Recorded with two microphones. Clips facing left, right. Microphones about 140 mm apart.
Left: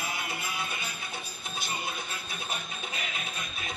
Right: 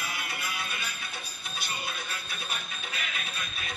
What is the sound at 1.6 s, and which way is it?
Music, 25° left (ahead or behind).